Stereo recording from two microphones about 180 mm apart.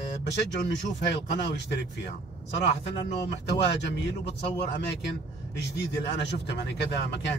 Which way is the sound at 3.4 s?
70° left (ahead or behind).